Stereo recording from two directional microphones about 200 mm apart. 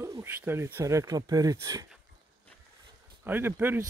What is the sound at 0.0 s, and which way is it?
Speech, 15° right (ahead or behind).